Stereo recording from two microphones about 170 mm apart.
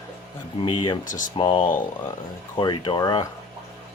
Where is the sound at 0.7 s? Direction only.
30° left (ahead or behind).